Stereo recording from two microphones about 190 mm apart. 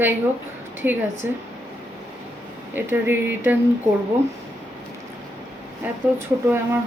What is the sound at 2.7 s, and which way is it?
Speech, 10° right (ahead or behind).